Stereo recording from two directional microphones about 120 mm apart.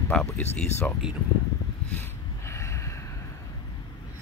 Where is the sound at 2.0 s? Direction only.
25° left (ahead or behind).